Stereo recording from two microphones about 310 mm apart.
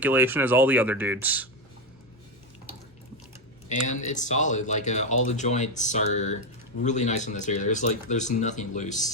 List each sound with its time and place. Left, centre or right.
0.0 s speech: centre
4.0 s speech: left